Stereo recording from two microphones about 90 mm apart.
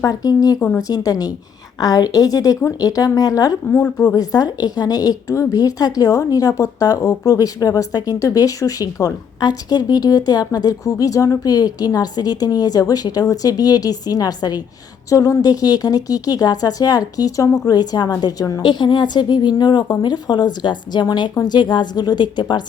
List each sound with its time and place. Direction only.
0.0 s speech: 45° left (ahead or behind)
3.7 s a woman's voice: 15° left (ahead or behind)
4.0 s speech: 45° left (ahead or behind)
18.6 s speech: 55° left (ahead or behind)